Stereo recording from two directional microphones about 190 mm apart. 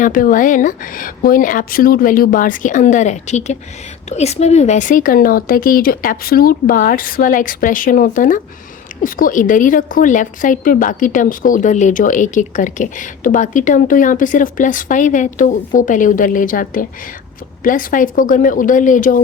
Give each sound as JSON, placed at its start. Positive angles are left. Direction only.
{"t": 0.0, "sound": "a woman's voice", "side_deg": 45}